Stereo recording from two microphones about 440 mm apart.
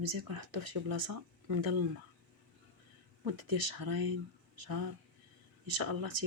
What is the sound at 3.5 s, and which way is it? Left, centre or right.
Speech, right.